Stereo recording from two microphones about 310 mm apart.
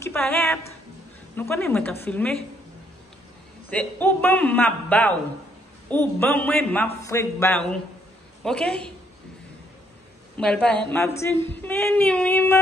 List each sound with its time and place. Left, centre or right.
0.0 s a man's voice: centre
3.7 s a man's voice: centre
6.9 s female singing: centre
8.5 s a man's voice: centre
10.3 s a man's voice: centre
10.9 s female singing: centre